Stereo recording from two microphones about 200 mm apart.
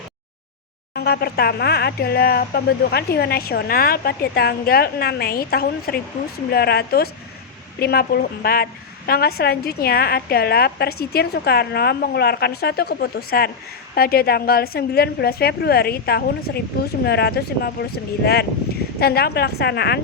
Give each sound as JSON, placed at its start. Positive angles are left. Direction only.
{"t": 0.9, "sound": "a woman's voice", "side_deg": 50}